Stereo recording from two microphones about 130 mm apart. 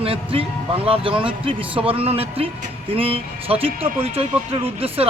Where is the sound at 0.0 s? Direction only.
45° right (ahead or behind).